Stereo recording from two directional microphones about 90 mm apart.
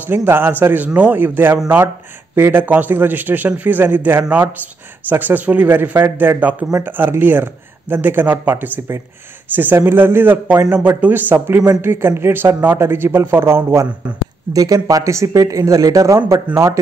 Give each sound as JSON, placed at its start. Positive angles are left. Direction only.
{"t": 0.0, "sound": "speech", "side_deg": -25}
{"t": 14.5, "sound": "speech", "side_deg": -40}